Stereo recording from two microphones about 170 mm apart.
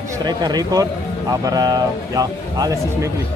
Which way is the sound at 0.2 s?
25° right (ahead or behind).